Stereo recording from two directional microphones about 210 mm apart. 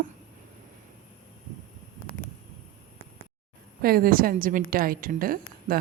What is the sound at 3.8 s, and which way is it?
A woman's voice, 45° right (ahead or behind).